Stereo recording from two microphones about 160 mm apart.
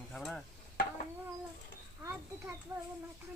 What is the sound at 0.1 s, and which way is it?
Stir, 5° left (ahead or behind).